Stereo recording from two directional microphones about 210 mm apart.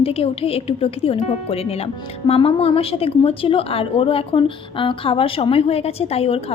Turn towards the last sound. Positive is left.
turn(degrees=30)  # may be behind; listen again after turning